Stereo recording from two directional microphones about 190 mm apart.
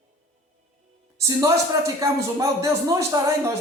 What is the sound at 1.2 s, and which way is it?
Speech, 15° right (ahead or behind).